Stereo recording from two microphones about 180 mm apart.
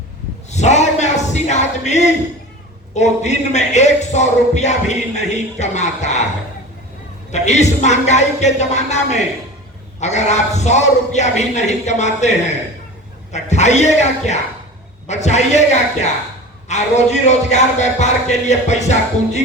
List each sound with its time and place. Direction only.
0.5 s a sound: 40° left (ahead or behind)
2.9 s speech: 40° left (ahead or behind)
7.3 s speech: 40° left (ahead or behind)
13.3 s speech: 40° left (ahead or behind)